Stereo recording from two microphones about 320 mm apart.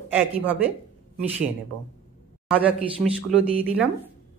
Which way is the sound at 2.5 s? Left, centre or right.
Centre.